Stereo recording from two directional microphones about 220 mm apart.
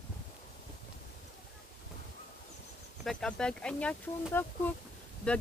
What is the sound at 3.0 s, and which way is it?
Speech, centre (ahead or behind).